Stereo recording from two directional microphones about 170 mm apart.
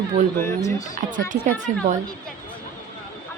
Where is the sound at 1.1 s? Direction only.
50° right (ahead or behind).